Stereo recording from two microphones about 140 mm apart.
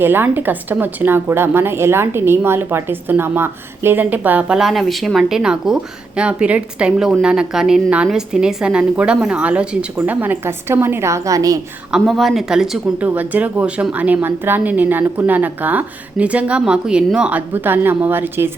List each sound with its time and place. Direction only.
0.0 s a woman's voice: 15° right (ahead or behind)
11.9 s a woman's voice: centre (ahead or behind)